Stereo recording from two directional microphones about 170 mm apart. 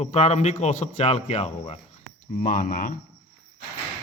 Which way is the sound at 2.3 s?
50° left (ahead or behind).